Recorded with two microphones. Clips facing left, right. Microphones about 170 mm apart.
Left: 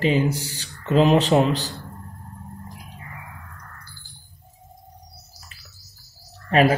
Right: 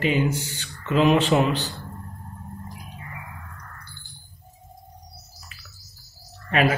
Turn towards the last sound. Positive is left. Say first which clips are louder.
# left 4 dB
turn(degrees=35)  # may be behind; listen again after turning